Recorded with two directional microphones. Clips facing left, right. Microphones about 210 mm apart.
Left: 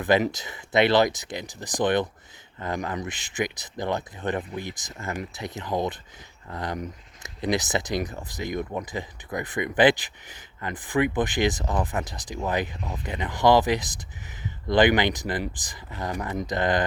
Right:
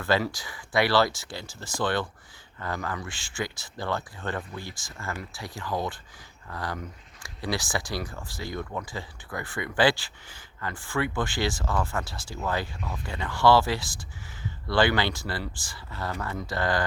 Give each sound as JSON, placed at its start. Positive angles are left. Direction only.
{"t": 0.0, "sound": "speech", "side_deg": 20}